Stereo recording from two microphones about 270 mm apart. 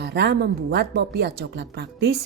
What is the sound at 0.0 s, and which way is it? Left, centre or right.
Speech, right.